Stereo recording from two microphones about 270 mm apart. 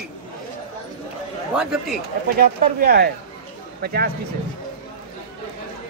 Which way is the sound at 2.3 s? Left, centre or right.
Right.